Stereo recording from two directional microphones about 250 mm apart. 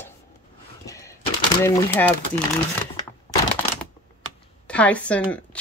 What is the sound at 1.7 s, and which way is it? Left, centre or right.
Speech, centre.